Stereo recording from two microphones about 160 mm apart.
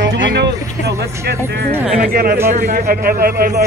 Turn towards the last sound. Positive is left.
turn(degrees=-70)  # may be behind; listen again after turning